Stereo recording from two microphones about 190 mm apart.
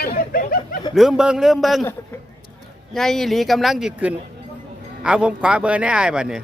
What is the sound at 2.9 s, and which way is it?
Speech, centre (ahead or behind).